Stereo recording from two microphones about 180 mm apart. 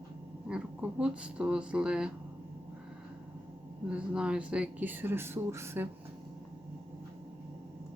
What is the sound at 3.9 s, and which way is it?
Speech, 5° right (ahead or behind).